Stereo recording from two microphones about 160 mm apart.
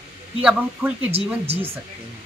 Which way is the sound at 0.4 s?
10° right (ahead or behind).